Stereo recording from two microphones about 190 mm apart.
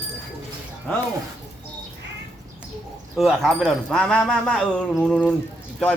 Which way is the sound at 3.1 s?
Centre (ahead or behind).